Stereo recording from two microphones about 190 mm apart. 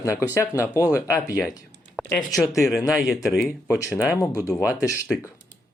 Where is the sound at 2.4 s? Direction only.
15° left (ahead or behind).